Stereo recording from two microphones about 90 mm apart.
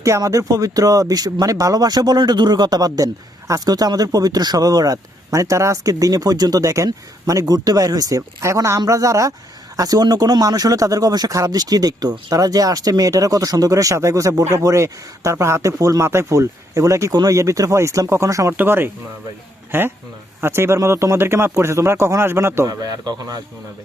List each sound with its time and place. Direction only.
0.0 s speech: 35° right (ahead or behind)
18.5 s speech: 25° right (ahead or behind); by 23.4 s 45° right (ahead or behind)